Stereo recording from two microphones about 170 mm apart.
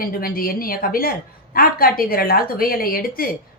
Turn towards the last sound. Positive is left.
turn(degrees=60)  # may be behind; listen again after turning